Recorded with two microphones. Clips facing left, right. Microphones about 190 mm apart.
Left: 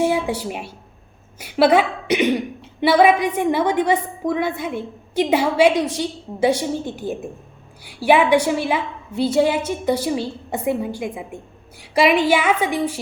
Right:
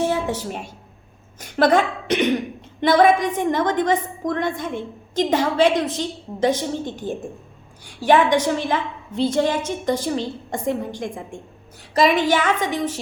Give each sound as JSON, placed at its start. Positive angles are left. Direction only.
{"t": 0.0, "sound": "speech", "side_deg": 10}